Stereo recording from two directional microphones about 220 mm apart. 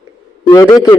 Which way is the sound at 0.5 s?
15° left (ahead or behind).